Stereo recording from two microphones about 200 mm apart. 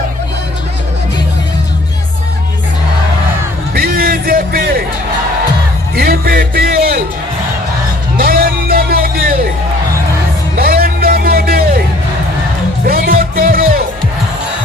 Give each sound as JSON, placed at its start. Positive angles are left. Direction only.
{"t": 3.8, "sound": "music", "side_deg": -50}
{"t": 6.0, "sound": "music", "side_deg": -50}
{"t": 8.2, "sound": "music", "side_deg": -50}
{"t": 10.6, "sound": "a sound", "side_deg": -50}
{"t": 12.8, "sound": "music", "side_deg": -50}